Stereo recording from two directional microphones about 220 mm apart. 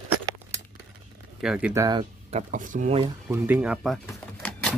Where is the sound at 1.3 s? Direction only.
5° right (ahead or behind).